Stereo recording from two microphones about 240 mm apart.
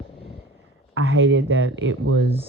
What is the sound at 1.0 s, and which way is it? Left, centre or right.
Speech, right.